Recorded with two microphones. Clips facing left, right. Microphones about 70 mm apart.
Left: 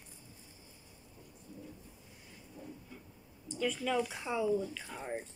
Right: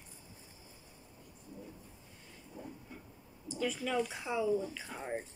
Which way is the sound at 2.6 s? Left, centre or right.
Right.